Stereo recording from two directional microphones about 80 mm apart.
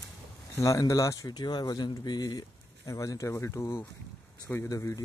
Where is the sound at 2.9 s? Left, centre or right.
Left.